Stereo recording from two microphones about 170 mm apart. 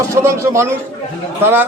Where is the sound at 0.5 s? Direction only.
15° right (ahead or behind).